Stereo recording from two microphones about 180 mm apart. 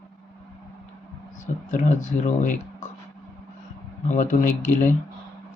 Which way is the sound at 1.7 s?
45° left (ahead or behind).